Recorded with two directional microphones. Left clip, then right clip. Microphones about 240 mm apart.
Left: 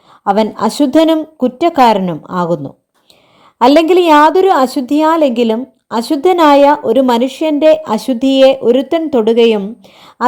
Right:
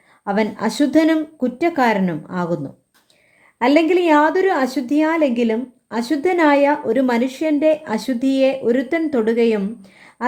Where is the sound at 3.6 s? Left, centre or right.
Left.